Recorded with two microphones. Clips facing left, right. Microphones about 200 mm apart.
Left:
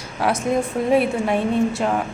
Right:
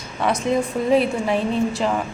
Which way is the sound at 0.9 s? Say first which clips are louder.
Even; 5° left (ahead or behind).